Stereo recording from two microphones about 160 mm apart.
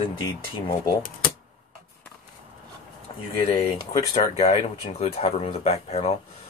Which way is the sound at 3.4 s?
40° left (ahead or behind).